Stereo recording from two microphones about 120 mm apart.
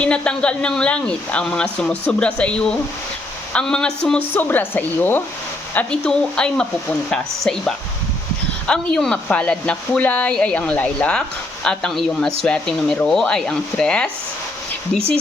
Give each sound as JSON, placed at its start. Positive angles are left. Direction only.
{"t": 0.0, "sound": "speech", "side_deg": 10}
{"t": 4.4, "sound": "speech", "side_deg": 15}